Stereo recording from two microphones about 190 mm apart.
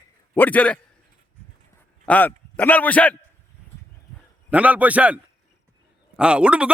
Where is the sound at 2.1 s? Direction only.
10° left (ahead or behind).